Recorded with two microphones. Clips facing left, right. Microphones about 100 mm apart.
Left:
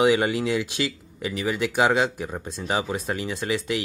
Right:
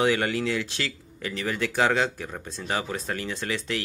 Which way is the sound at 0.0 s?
15° left (ahead or behind).